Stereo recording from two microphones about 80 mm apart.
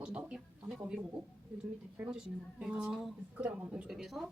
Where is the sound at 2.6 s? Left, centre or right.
Centre.